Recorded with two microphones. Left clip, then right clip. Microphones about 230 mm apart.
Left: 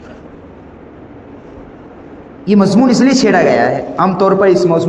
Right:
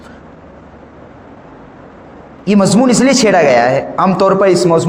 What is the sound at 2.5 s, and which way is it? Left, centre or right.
A man's voice, right.